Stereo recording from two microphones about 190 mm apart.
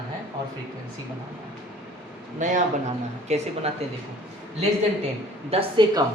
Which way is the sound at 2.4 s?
40° right (ahead or behind).